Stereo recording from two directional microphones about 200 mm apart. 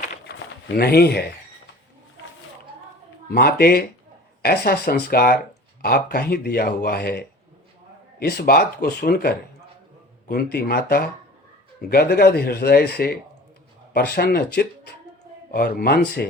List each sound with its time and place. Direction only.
0.8 s speech: 50° left (ahead or behind)
3.2 s speech: 50° left (ahead or behind)